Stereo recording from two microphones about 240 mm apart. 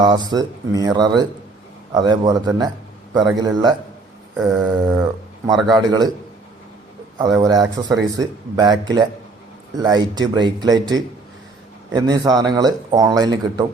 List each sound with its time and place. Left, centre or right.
0.3 s speech: centre
7.2 s speech: centre